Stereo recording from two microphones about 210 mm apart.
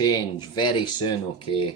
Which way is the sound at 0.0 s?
20° left (ahead or behind).